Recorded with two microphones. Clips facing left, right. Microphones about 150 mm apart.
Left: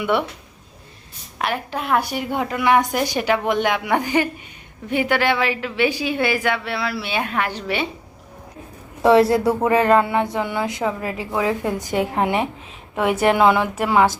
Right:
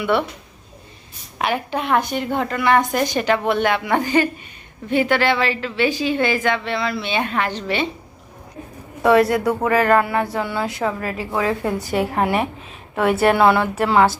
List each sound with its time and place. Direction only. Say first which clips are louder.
0.0 s a woman's voice: right 1 dB; 15° left (ahead or behind)
1.4 s a woman's voice: right 3 dB; centre (ahead or behind)
9.0 s a woman's voice: left 1 dB; 30° left (ahead or behind)